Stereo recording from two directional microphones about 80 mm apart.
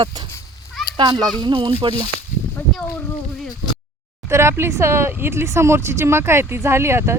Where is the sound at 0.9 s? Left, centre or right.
Right.